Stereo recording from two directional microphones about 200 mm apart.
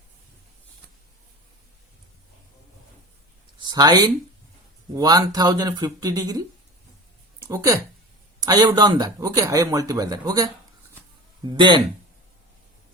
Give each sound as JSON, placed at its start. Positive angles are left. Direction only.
{"t": 3.6, "sound": "speech", "side_deg": -20}
{"t": 7.4, "sound": "speech", "side_deg": -15}